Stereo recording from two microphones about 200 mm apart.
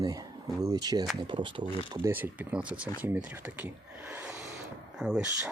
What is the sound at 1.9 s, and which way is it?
Speech, 10° right (ahead or behind).